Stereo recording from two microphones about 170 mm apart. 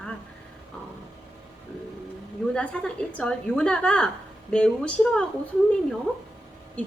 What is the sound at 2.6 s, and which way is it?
A woman's voice, 5° left (ahead or behind).